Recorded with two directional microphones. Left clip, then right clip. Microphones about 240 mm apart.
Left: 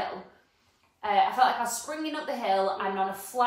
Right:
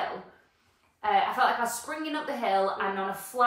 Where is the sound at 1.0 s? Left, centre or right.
Centre.